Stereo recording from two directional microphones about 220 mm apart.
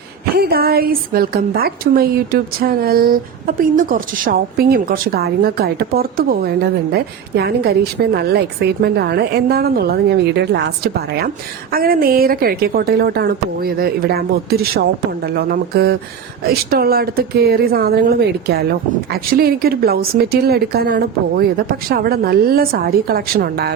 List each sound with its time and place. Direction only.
0.3 s a woman's voice: 45° right (ahead or behind)